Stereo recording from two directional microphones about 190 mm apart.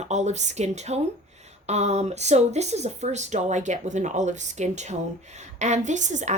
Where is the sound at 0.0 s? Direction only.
35° right (ahead or behind).